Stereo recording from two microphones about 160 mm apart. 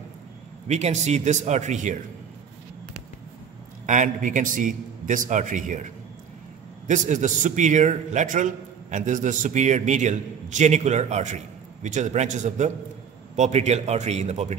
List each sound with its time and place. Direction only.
0.7 s a man's voice: 45° right (ahead or behind)
3.8 s a man's voice: 50° right (ahead or behind)
6.9 s a man's voice: 50° right (ahead or behind)